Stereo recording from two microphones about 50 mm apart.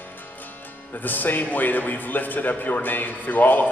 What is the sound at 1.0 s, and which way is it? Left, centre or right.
A man's voice, left.